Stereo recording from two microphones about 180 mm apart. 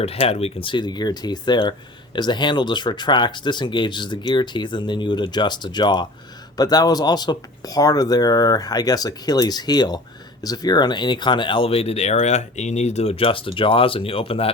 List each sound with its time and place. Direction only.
0.0 s speech: 35° left (ahead or behind)